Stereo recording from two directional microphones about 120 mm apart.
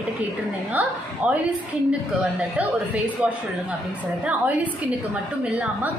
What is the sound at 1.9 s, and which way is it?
A woman's voice, 10° right (ahead or behind).